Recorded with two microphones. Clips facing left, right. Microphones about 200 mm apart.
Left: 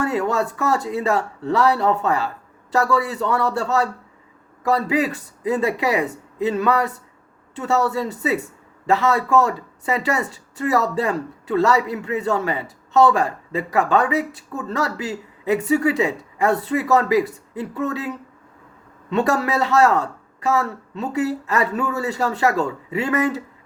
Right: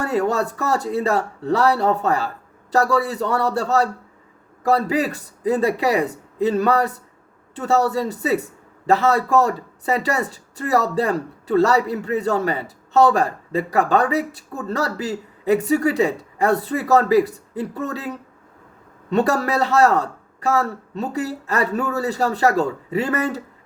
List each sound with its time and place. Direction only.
0.0 s speech: 35° right (ahead or behind)
19.1 s a woman's voice: 35° right (ahead or behind)